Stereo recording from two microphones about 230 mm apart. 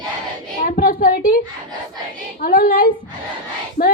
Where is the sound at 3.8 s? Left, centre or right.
Left.